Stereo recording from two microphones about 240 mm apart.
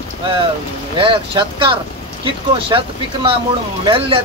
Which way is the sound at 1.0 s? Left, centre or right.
Right.